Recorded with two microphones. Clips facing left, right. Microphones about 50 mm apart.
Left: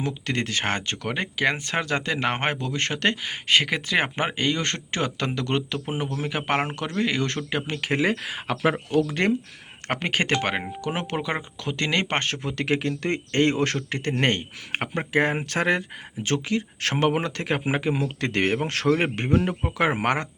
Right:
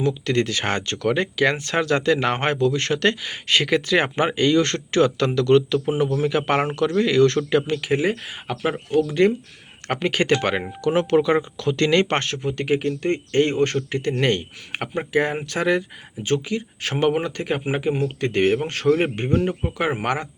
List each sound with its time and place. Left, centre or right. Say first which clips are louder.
0.0 s speech: right 6 dB; left
7.8 s speech: right 2 dB; left
9.9 s speech: right 4 dB; left
12.4 s speech: right 3 dB; left
16.2 s speech: right 2 dB; left
20.0 s speech: even; left